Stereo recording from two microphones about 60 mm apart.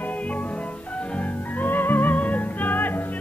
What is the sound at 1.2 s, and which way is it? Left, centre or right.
Music, left.